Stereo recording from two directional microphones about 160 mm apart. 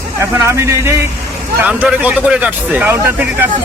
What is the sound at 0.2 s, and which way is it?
Speech, 15° right (ahead or behind).